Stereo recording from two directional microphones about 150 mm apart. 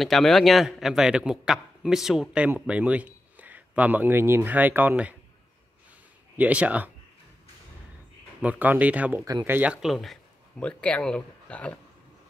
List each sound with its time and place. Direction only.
0.0 s a man's voice: centre (ahead or behind)
6.3 s a man's voice: 10° right (ahead or behind)
8.4 s a man's voice: 10° right (ahead or behind)
9.2 s speech: 20° right (ahead or behind)
9.6 s speech: 5° right (ahead or behind)